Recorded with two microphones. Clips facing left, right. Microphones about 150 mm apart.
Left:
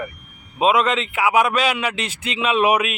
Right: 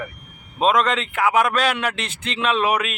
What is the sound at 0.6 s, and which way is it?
A man's voice, 5° left (ahead or behind).